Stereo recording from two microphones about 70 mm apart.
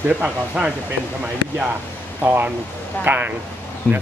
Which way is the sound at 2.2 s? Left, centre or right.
Right.